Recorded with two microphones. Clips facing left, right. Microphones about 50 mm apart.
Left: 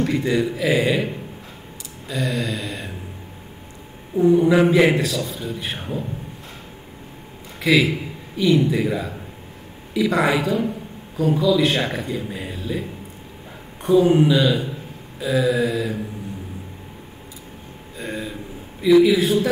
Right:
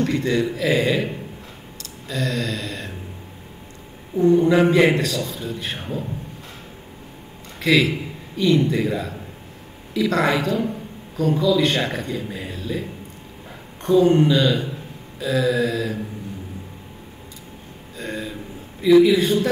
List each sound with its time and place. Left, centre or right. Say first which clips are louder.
0.0 s a man's voice: even; centre
4.1 s a man's voice: even; centre
7.6 s a man's voice: even; centre
13.8 s a man's voice: even; centre
17.9 s a sound: even; centre